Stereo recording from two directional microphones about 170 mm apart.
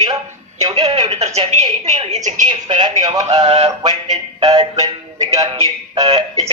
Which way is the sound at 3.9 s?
25° right (ahead or behind).